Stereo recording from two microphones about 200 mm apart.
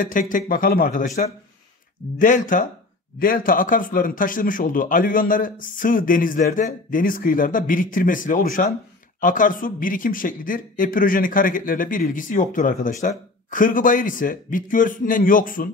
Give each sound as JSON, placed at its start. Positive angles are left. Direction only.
{"t": 0.0, "sound": "speech", "side_deg": 40}